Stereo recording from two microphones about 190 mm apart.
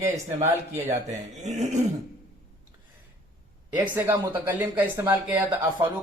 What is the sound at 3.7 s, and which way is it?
Speech, 10° right (ahead or behind).